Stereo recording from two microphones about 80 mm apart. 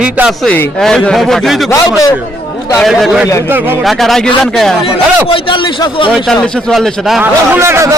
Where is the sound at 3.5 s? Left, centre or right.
Right.